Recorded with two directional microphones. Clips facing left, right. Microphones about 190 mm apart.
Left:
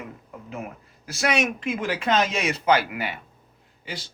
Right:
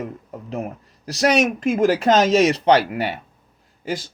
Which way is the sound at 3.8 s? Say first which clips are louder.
Right 10 dB; 45° right (ahead or behind).